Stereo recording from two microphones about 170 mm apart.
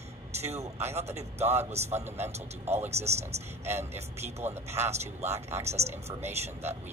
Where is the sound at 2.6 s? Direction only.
15° right (ahead or behind).